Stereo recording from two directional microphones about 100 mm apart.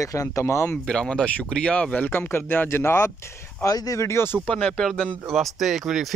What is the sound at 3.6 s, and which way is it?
Speech, 35° left (ahead or behind).